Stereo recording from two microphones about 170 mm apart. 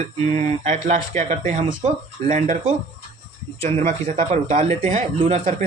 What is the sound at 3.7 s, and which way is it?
Speech, 40° right (ahead or behind).